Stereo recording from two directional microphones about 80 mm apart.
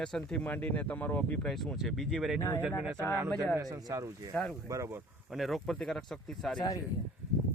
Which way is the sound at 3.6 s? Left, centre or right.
Right.